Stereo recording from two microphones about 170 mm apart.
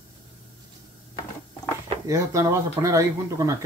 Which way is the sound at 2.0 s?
20° right (ahead or behind).